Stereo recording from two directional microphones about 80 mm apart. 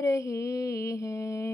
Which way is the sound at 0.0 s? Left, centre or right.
Left.